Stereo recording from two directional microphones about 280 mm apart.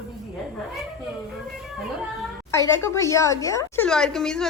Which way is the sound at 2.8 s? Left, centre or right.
Centre.